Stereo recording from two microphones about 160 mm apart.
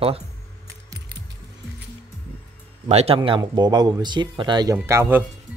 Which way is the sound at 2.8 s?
40° right (ahead or behind).